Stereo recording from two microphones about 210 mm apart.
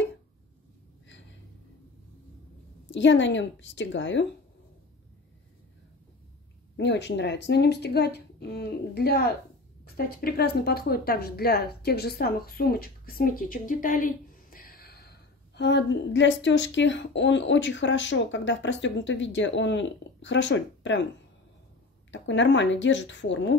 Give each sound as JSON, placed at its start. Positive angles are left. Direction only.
{"t": 2.9, "sound": "speech", "side_deg": 60}
{"t": 6.8, "sound": "speech", "side_deg": 55}
{"t": 22.1, "sound": "speech", "side_deg": 60}